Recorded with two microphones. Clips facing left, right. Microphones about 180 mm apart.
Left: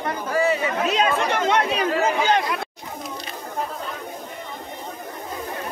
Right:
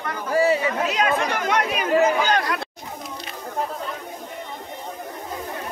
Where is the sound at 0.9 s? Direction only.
25° left (ahead or behind).